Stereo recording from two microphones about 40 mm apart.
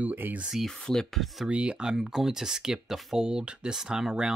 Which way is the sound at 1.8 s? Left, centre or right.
Centre.